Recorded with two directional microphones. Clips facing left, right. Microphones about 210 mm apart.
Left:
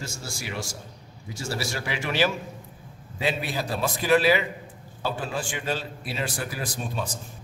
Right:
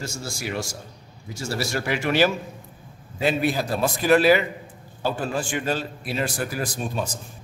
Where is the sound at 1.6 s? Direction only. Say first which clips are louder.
Right 7 dB; 45° right (ahead or behind).